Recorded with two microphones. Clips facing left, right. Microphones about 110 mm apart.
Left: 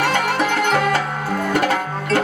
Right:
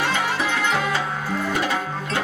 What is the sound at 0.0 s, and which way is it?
Music, 65° left (ahead or behind).